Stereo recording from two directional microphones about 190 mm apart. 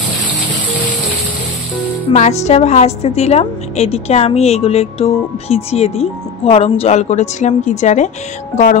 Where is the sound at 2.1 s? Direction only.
35° left (ahead or behind).